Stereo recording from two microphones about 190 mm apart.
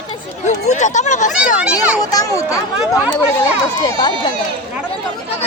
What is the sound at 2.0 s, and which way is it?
Speech, 20° left (ahead or behind).